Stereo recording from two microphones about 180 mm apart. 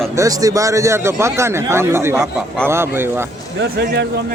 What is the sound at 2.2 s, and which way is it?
Speech, 5° left (ahead or behind).